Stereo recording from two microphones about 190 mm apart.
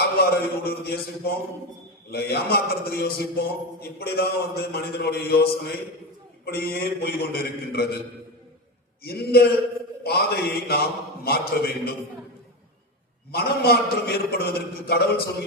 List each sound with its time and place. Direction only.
0.0 s a man's voice: 55° left (ahead or behind)
9.0 s a man's voice: 55° left (ahead or behind)
13.3 s a man's voice: 55° left (ahead or behind)